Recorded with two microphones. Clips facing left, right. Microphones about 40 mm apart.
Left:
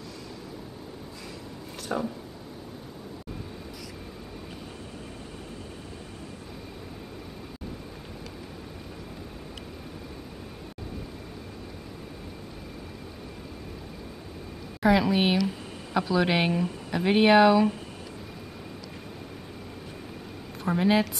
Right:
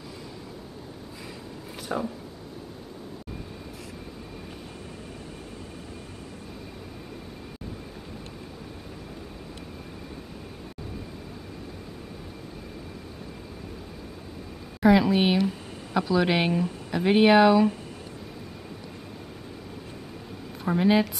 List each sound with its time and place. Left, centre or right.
1.8 s a sound: centre
14.8 s a woman's voice: centre
20.6 s a woman's voice: centre